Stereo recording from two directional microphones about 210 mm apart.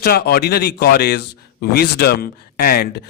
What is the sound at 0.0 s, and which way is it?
A man's voice, 45° left (ahead or behind).